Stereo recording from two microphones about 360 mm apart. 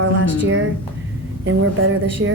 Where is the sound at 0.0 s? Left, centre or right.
Right.